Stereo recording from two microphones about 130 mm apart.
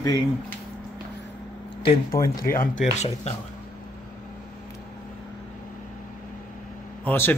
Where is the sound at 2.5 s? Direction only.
70° left (ahead or behind).